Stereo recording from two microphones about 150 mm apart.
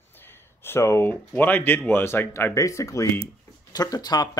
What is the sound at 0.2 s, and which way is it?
Speech, 15° left (ahead or behind).